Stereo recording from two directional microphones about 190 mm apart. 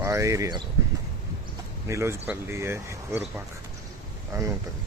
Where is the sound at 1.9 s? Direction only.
15° right (ahead or behind).